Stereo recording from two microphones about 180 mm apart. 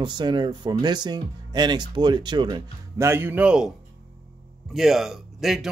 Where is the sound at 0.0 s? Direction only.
25° right (ahead or behind).